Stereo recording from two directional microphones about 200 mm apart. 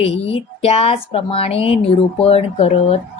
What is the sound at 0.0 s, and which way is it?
Speech, 30° left (ahead or behind).